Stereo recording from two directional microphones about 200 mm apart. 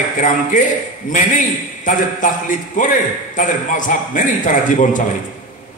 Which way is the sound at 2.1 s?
40° left (ahead or behind).